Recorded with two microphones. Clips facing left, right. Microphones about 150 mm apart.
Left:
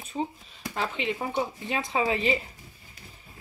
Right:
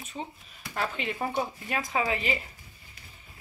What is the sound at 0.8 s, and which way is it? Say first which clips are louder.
Speech: left 1 dB; 20° left (ahead or behind).